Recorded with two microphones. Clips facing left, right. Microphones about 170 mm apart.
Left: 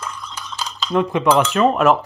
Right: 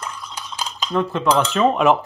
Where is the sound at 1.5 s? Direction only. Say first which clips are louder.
Left 1 dB; centre (ahead or behind).